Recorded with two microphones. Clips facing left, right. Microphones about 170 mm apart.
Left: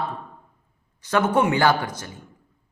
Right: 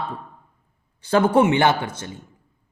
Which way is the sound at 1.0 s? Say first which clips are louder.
Right 4 dB; 30° right (ahead or behind).